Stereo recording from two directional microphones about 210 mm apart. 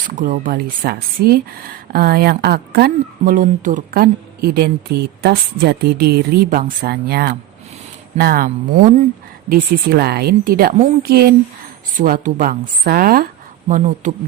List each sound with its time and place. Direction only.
0.2 s speech: 40° right (ahead or behind)
9.5 s speech: 50° right (ahead or behind)